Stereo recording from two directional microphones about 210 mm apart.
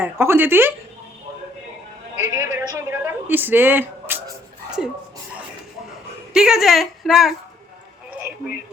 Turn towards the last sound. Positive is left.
turn(degrees=0)  # may be behind; listen again after turning